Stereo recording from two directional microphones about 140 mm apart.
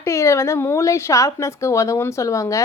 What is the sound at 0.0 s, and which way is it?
Speech, 20° left (ahead or behind).